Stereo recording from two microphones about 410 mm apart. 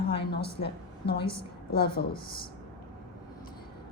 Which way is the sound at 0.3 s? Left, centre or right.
Left.